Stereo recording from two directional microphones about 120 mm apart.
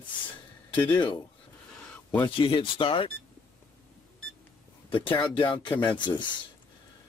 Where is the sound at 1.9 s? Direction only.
10° left (ahead or behind).